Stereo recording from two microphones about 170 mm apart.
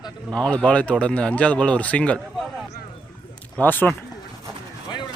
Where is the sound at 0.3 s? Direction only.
5° left (ahead or behind).